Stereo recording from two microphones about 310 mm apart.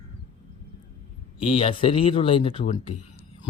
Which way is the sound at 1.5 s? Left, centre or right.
Centre.